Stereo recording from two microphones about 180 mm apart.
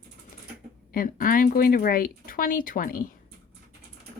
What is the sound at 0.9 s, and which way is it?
Speech, 50° left (ahead or behind).